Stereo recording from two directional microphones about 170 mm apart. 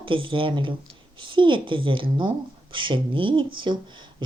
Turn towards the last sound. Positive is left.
turn(degrees=-25)  # may be behind; listen again after turning